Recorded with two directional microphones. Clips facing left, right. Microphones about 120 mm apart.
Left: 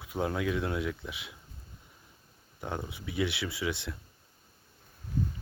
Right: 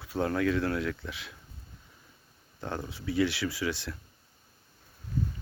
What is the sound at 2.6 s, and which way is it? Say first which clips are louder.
Speech: right 1 dB; 15° left (ahead or behind).